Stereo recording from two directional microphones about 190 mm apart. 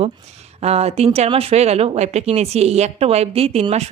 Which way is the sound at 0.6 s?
35° right (ahead or behind).